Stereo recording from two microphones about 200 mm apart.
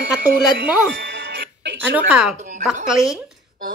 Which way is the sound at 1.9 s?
10° right (ahead or behind).